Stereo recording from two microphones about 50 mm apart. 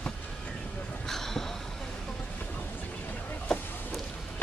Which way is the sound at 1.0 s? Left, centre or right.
Centre.